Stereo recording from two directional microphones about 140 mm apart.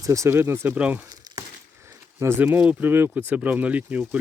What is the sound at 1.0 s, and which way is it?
Crumpling, 30° right (ahead or behind).